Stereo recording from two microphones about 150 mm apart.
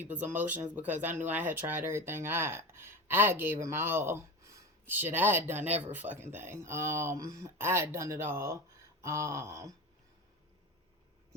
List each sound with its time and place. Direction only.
0.0 s speech: 10° right (ahead or behind)